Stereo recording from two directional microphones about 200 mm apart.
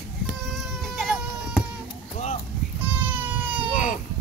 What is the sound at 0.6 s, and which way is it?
Baby cry, centre (ahead or behind).